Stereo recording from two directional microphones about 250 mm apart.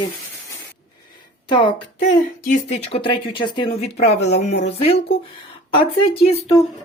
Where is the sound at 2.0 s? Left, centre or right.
Left.